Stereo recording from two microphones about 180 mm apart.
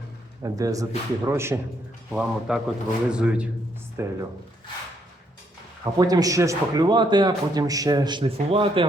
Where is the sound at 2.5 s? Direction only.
5° right (ahead or behind).